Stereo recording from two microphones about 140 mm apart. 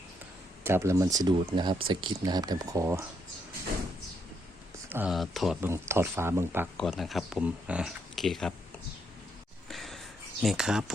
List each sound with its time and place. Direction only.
0.6 s speech: 20° right (ahead or behind)
4.9 s speech: 15° right (ahead or behind)
5.1 s speech: centre (ahead or behind)
5.5 s speech: 20° right (ahead or behind)
6.7 s speech: centre (ahead or behind)
9.6 s a sound: centre (ahead or behind)
10.4 s speech: 5° right (ahead or behind)